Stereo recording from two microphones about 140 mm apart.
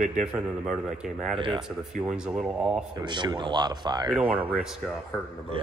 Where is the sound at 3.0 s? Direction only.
30° right (ahead or behind).